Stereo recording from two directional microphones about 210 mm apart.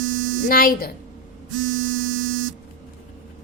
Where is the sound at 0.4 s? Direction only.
45° left (ahead or behind).